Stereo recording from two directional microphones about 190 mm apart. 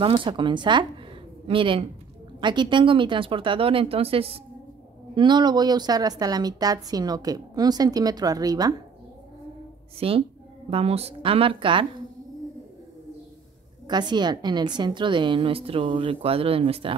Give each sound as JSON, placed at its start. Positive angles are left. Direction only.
{"t": 0.0, "sound": "a woman's voice", "side_deg": -25}
{"t": 9.9, "sound": "a woman's voice", "side_deg": -30}
{"t": 13.8, "sound": "a woman's voice", "side_deg": -20}